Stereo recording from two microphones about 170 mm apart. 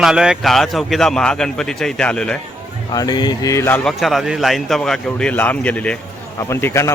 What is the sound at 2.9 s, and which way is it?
Speech, 25° left (ahead or behind).